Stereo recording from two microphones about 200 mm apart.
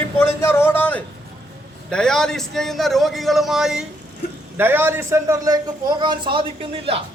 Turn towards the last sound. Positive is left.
turn(degrees=-25)  # may be behind; listen again after turning